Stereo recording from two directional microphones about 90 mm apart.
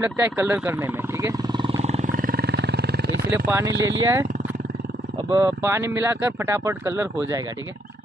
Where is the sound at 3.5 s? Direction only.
30° right (ahead or behind).